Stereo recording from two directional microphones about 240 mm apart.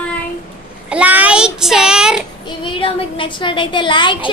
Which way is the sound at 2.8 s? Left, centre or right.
Left.